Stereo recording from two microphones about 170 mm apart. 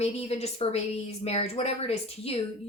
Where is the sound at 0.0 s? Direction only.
40° left (ahead or behind).